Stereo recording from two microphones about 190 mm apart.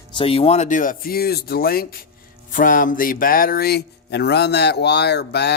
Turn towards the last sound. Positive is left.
turn(degrees=60)  # may be behind; listen again after turning